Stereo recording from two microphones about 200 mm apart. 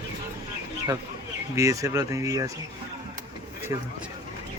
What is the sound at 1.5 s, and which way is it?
Speech, 15° right (ahead or behind).